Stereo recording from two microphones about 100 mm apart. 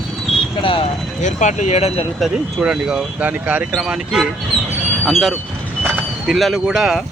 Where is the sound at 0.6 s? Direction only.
60° left (ahead or behind).